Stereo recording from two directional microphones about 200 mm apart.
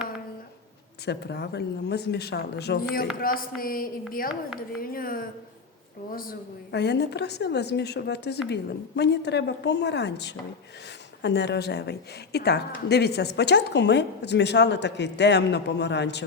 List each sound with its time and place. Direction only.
1.0 s a woman's voice: 55° left (ahead or behind)